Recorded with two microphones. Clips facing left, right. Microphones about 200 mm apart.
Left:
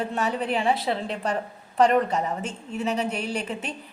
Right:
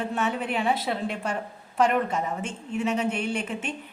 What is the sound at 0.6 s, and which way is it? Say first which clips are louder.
Speech: left 1 dB; centre (ahead or behind).